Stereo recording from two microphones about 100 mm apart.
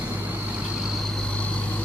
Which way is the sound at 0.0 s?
15° right (ahead or behind).